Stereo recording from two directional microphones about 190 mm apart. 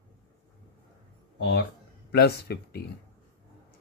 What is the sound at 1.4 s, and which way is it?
Speech, 65° left (ahead or behind).